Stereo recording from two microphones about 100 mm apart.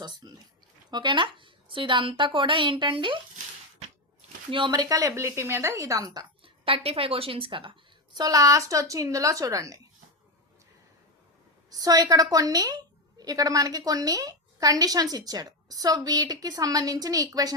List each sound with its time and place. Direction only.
0.0 s a woman's voice: 45° right (ahead or behind)
4.5 s a woman's voice: 45° right (ahead or behind)
6.4 s speech: 65° right (ahead or behind)
8.1 s a woman's voice: 40° right (ahead or behind)
11.7 s a woman's voice: 40° right (ahead or behind)